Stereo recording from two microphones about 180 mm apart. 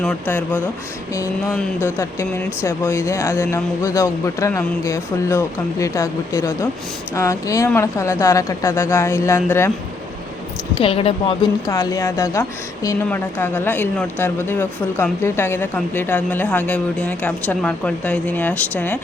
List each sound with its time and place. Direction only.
0.0 s a woman's voice: 10° left (ahead or behind)
10.8 s speech: 30° left (ahead or behind)
11.6 s a woman's voice: 20° left (ahead or behind)